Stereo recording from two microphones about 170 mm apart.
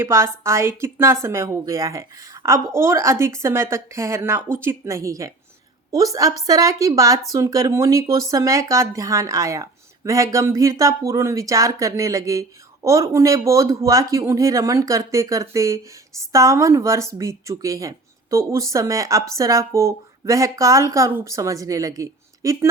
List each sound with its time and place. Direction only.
0.0 s speech: 15° right (ahead or behind)